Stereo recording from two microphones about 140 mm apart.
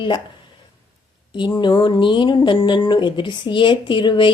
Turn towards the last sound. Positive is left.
turn(degrees=35)  # may be behind; listen again after turning